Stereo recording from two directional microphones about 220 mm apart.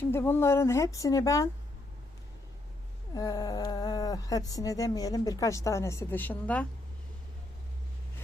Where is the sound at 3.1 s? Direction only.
15° left (ahead or behind).